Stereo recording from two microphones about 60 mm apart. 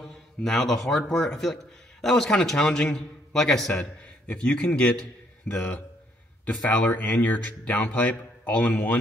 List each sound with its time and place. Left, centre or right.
0.0 s a man's voice: centre
4.3 s a man's voice: centre
5.5 s speech: left
6.4 s speech: left